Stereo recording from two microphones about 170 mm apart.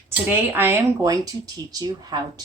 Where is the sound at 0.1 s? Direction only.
10° right (ahead or behind).